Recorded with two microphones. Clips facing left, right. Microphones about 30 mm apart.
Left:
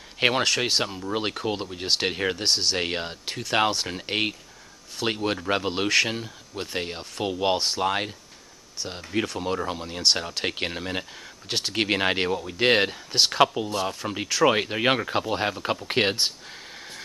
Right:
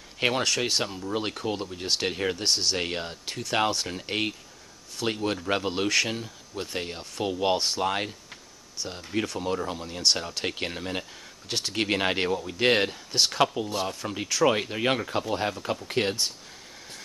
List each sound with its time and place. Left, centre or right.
0.2 s speech: left
8.8 s speech: left